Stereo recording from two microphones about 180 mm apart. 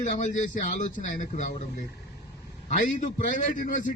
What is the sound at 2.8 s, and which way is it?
A man's voice, 45° left (ahead or behind).